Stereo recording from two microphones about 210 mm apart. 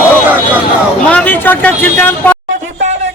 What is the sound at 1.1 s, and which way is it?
A man's voice, 10° left (ahead or behind).